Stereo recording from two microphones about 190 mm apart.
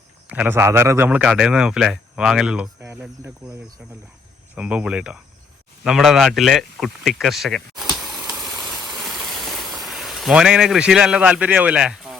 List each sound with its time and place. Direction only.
0.3 s a man's voice: 10° right (ahead or behind)
8.3 s vehicle: 20° right (ahead or behind)
9.0 s a sound: centre (ahead or behind)